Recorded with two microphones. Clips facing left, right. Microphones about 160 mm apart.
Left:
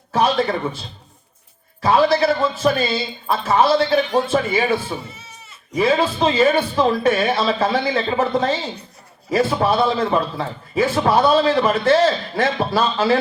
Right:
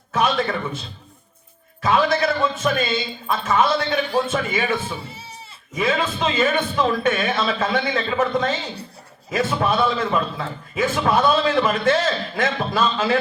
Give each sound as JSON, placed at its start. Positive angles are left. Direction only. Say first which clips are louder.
{"t": 0.1, "sound": "a man's voice", "louder": "left 3 dB", "side_deg": 30}
{"t": 5.1, "sound": "goat", "louder": "right 3 dB", "side_deg": -30}
{"t": 5.7, "sound": "a man's voice", "louder": "left 5 dB", "side_deg": 35}